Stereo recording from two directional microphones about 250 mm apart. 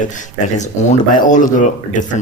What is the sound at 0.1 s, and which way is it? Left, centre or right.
Speech, left.